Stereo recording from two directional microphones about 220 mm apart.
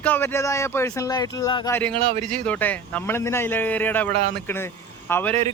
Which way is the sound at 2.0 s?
30° right (ahead or behind).